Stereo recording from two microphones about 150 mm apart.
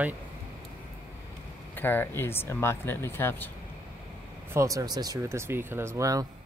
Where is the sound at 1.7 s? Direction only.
15° left (ahead or behind).